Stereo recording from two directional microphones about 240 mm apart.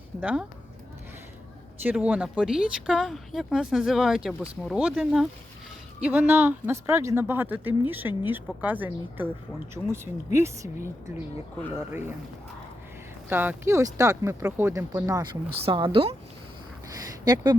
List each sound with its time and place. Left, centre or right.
0.2 s speech: centre
1.8 s speech: centre
13.2 s speech: centre
16.9 s a sound: centre